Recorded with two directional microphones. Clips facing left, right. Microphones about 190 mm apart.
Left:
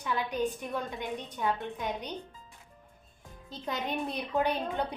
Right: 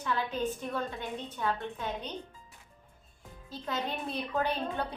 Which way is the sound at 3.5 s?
20° left (ahead or behind).